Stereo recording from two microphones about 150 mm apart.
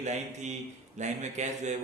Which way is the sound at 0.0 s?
50° right (ahead or behind).